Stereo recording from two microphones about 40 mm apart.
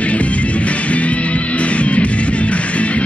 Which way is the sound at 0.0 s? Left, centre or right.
Left.